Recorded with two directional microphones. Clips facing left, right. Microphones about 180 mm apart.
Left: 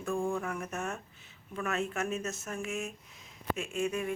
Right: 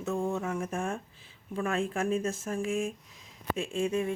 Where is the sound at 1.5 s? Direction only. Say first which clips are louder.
Right 3 dB; 30° right (ahead or behind).